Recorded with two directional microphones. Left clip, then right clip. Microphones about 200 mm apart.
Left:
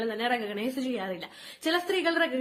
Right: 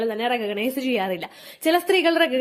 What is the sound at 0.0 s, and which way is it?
A woman's voice, 30° right (ahead or behind).